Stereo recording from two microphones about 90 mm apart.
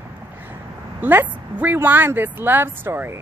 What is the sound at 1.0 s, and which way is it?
Speech, 20° right (ahead or behind).